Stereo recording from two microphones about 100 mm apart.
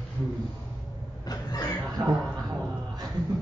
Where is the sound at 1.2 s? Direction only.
40° left (ahead or behind).